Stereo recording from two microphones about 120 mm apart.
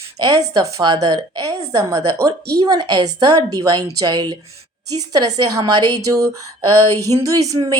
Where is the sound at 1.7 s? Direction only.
25° right (ahead or behind).